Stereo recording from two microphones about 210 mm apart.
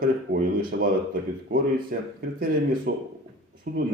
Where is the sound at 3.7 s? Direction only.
45° right (ahead or behind).